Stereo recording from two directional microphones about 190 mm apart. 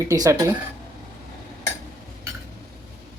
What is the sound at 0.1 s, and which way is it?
Speech, 15° right (ahead or behind).